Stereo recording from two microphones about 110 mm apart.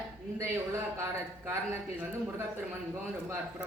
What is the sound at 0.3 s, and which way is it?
Speech, 25° right (ahead or behind).